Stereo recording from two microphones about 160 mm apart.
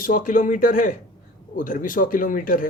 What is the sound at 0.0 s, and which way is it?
A man's voice, 55° left (ahead or behind).